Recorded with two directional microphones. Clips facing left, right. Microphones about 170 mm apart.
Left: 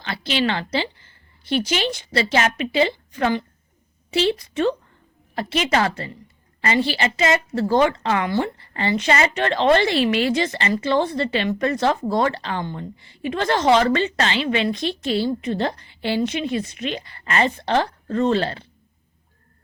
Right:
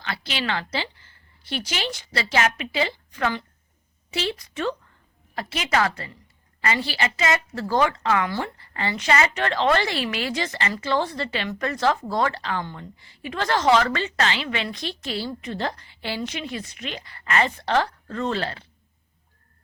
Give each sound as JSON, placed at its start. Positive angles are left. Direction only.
{"t": 0.0, "sound": "a woman's voice", "side_deg": 25}